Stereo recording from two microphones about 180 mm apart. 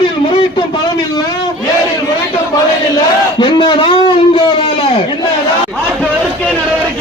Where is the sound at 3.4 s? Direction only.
25° left (ahead or behind).